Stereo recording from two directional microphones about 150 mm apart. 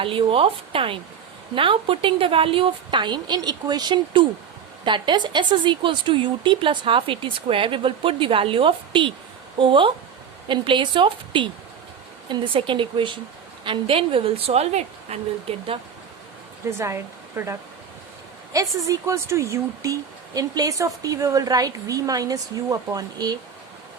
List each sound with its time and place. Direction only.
0.0 s a woman's voice: 35° right (ahead or behind)
16.6 s a woman's voice: 20° right (ahead or behind)